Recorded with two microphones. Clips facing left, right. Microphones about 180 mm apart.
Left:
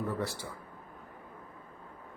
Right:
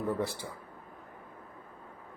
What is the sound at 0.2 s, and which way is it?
Speech, 15° right (ahead or behind).